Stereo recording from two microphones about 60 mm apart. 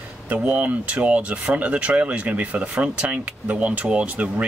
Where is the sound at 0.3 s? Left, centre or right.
Right.